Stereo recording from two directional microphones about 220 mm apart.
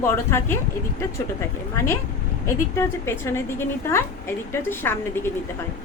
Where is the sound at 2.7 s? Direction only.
10° left (ahead or behind).